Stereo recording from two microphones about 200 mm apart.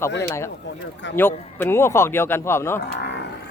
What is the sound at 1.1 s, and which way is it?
Speech, 10° left (ahead or behind).